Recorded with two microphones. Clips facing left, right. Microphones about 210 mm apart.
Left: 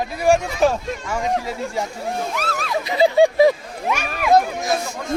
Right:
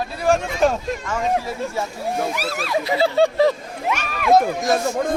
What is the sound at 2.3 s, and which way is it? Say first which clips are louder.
Speech: right 1 dB; 10° right (ahead or behind).